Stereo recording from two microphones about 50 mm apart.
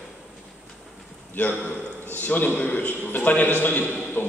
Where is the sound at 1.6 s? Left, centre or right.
Left.